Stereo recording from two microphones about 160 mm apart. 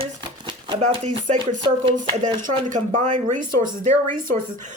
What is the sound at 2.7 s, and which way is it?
Speech, 50° right (ahead or behind).